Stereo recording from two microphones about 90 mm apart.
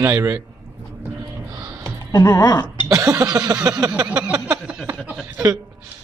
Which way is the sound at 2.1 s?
40° left (ahead or behind).